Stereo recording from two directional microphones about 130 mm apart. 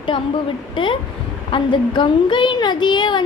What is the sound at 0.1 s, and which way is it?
A woman's voice, 40° left (ahead or behind).